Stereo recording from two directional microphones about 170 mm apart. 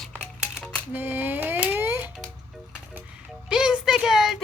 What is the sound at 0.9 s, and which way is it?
Speech, 10° right (ahead or behind).